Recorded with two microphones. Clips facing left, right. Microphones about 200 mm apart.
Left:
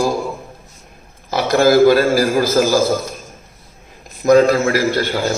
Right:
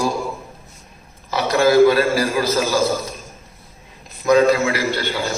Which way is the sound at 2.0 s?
50° left (ahead or behind).